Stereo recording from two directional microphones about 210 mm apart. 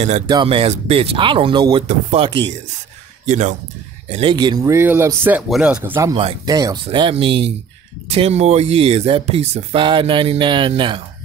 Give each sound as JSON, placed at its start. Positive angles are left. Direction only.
{"t": 0.3, "sound": "speech", "side_deg": -25}
{"t": 5.9, "sound": "speech", "side_deg": -15}